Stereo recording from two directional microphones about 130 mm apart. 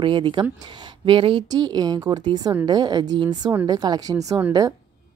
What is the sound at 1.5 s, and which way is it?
Speech, 30° right (ahead or behind).